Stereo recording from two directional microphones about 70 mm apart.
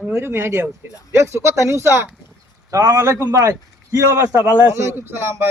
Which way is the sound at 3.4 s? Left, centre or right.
Right.